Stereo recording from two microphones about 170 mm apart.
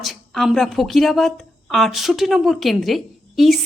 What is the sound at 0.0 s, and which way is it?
Speech, centre (ahead or behind).